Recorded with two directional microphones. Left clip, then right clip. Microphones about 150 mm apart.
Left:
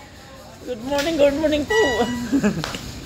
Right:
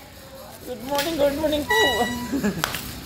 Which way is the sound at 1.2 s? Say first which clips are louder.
Left 5 dB; 65° left (ahead or behind).